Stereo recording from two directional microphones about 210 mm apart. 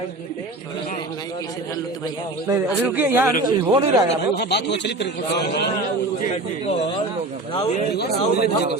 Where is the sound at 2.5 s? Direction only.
10° right (ahead or behind).